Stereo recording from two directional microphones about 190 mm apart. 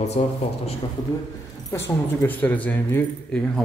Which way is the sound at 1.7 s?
15° left (ahead or behind).